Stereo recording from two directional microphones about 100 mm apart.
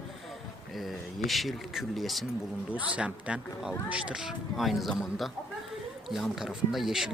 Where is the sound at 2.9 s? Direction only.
10° right (ahead or behind).